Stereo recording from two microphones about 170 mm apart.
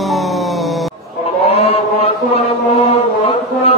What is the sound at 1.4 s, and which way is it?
Chant, 35° left (ahead or behind).